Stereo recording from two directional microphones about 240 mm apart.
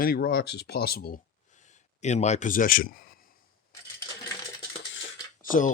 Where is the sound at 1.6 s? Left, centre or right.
Left.